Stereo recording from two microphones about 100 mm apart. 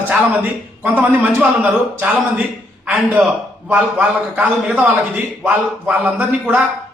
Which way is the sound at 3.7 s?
15° right (ahead or behind).